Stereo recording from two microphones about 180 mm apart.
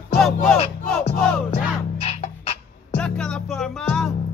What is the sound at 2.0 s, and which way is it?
Music, 35° left (ahead or behind).